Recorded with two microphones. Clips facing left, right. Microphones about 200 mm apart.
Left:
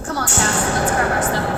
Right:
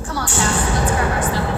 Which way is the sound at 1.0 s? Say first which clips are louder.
Left 1 dB; 45° left (ahead or behind).